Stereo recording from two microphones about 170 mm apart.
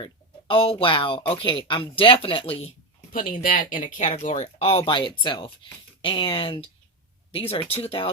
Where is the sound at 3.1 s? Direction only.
55° left (ahead or behind); by 8.1 s 35° left (ahead or behind).